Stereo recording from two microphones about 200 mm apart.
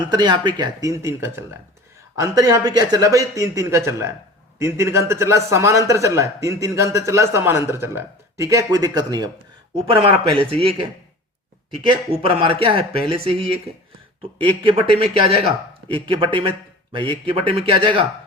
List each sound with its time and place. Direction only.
0.1 s a man's voice: 20° right (ahead or behind)